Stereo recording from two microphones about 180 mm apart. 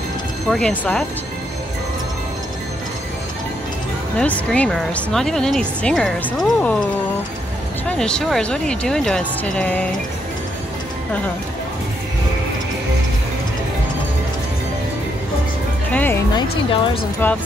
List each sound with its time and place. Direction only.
0.5 s speech: 5° left (ahead or behind)
4.2 s speech: 5° left (ahead or behind)
7.9 s speech: 5° left (ahead or behind)
15.9 s speech: 10° left (ahead or behind)
16.3 s a woman's voice: 30° left (ahead or behind)